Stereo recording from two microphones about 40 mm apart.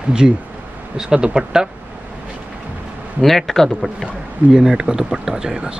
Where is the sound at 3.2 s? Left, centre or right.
Centre.